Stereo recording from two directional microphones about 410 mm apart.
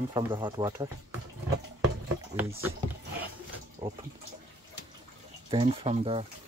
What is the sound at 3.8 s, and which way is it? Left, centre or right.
Speech, centre.